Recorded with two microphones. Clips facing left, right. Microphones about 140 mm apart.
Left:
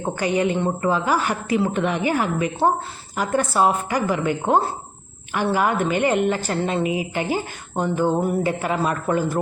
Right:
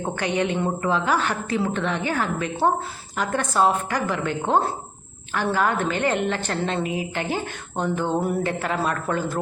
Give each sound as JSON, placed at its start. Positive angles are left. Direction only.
{"t": 0.0, "sound": "a woman's voice", "side_deg": 5}